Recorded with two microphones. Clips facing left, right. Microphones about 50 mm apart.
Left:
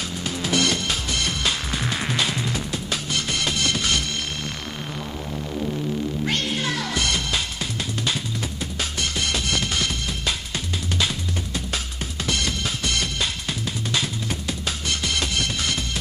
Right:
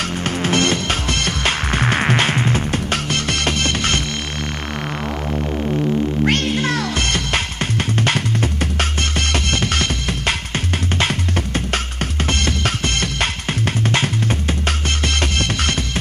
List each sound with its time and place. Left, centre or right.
0.2 s music: right
5.3 s synthesizer: right
6.2 s music: right